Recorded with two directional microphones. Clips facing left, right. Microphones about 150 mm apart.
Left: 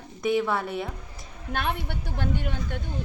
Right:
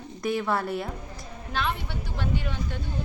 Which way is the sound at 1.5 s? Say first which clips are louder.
Left 1 dB; 55° left (ahead or behind).